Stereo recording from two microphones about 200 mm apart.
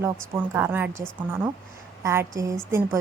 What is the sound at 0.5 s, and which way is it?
Speech, 10° right (ahead or behind).